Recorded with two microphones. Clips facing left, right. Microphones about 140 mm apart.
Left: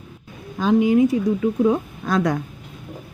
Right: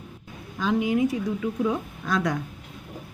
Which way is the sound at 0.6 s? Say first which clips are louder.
Left 7 dB; 35° left (ahead or behind).